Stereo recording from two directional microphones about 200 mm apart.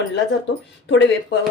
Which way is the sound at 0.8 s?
60° left (ahead or behind).